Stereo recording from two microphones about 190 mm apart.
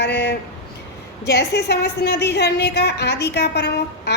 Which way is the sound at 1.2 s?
60° left (ahead or behind).